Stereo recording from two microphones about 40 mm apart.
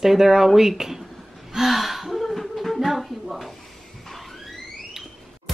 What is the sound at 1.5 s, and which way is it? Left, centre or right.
Gasp, centre.